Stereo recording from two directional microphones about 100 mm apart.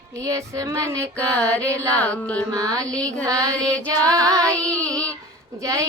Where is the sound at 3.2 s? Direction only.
35° right (ahead or behind).